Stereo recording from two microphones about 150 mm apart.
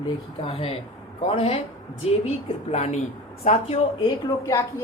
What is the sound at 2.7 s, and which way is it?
Speech, 50° left (ahead or behind).